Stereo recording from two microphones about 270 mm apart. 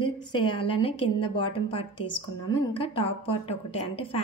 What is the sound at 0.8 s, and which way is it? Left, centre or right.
A woman's voice, centre.